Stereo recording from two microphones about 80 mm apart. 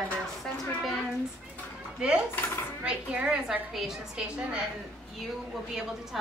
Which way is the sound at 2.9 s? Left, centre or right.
Centre.